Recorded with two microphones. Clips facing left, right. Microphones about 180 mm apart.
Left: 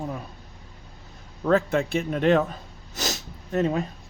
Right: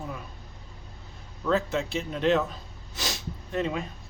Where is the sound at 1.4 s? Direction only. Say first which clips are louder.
Left 5 dB; 55° left (ahead or behind).